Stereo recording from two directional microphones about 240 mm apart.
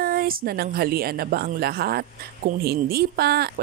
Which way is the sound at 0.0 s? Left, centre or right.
Right.